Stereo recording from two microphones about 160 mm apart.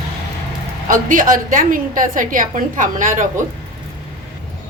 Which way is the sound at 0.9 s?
55° right (ahead or behind).